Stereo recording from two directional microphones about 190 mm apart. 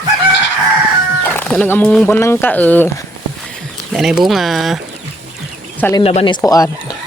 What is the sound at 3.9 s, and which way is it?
Speech, centre (ahead or behind).